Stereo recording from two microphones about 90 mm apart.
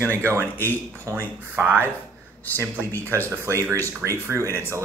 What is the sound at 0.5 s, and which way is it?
Speech, 25° left (ahead or behind).